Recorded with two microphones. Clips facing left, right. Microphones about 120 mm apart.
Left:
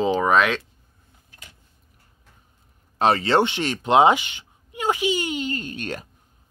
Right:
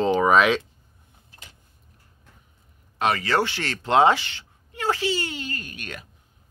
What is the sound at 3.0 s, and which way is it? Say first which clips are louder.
Speech: left 4 dB; 30° left (ahead or behind).